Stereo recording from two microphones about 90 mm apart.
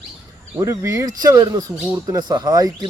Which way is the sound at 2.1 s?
50° right (ahead or behind).